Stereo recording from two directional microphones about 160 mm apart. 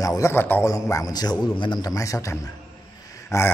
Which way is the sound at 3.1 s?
15° left (ahead or behind).